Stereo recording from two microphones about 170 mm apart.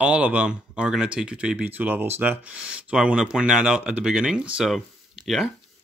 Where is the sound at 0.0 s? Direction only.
5° right (ahead or behind).